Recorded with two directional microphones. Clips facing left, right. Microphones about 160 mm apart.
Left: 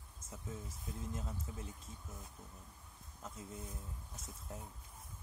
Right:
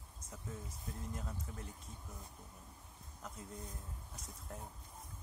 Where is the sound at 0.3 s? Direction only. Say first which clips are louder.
Left 1 dB; centre (ahead or behind).